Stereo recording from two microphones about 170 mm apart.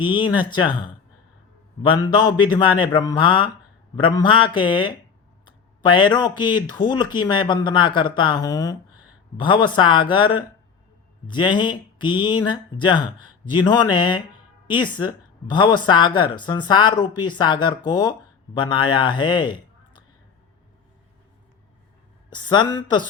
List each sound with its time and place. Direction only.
0.0 s a man's voice: 30° left (ahead or behind)
22.3 s speech: 25° left (ahead or behind)